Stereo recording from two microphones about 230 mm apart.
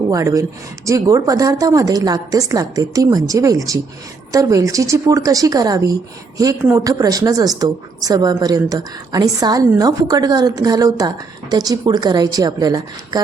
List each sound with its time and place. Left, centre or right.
0.1 s a woman's voice: centre